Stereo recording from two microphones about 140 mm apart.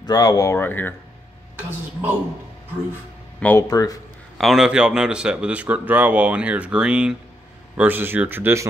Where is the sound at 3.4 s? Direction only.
10° left (ahead or behind).